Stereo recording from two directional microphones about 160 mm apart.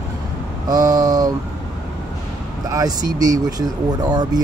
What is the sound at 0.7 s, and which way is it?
Speech, 25° right (ahead or behind).